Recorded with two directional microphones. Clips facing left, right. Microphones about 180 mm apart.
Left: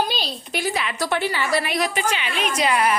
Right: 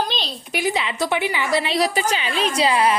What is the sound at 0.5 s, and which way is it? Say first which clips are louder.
A woman's voice: right 3 dB; 20° right (ahead or behind).